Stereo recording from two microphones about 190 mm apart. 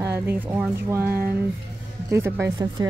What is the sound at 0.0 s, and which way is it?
Speech, 10° right (ahead or behind).